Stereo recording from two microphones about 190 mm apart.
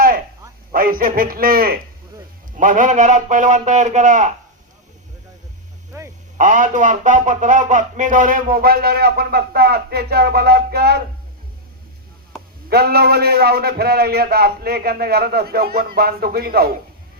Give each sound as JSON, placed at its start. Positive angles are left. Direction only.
{"t": 0.7, "sound": "a man's voice", "side_deg": -50}
{"t": 6.3, "sound": "speech", "side_deg": -40}
{"t": 12.6, "sound": "a man's voice", "side_deg": -55}